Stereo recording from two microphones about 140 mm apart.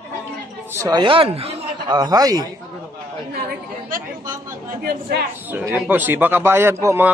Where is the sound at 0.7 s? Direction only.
25° right (ahead or behind).